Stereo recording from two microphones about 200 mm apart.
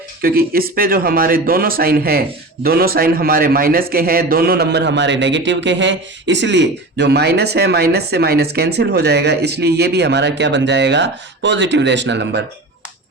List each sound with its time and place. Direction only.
0.2 s a man's voice: 50° right (ahead or behind)